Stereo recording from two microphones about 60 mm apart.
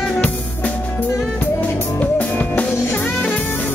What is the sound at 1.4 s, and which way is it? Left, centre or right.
Music, left.